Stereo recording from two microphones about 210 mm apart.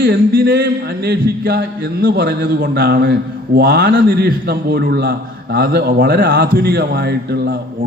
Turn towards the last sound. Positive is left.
turn(degrees=-50)  # may be behind; listen again after turning